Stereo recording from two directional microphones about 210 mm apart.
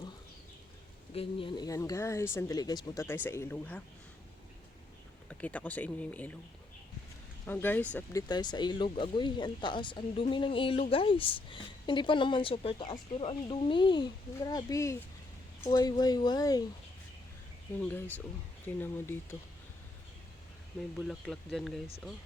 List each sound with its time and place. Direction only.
1.1 s speech: 25° left (ahead or behind); by 3.8 s 5° left (ahead or behind)
5.3 s speech: 5° left (ahead or behind)
7.4 s speech: 10° left (ahead or behind)
17.8 s speech: 10° left (ahead or behind)
21.1 s speech: centre (ahead or behind)